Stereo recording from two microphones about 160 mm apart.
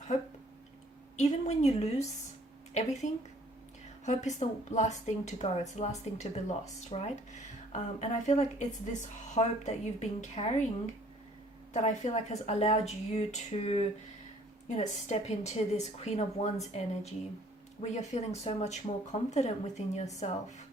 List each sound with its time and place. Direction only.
1.1 s a woman's voice: 45° left (ahead or behind)
3.0 s a woman's voice: 50° left (ahead or behind)
11.7 s a woman's voice: 45° left (ahead or behind)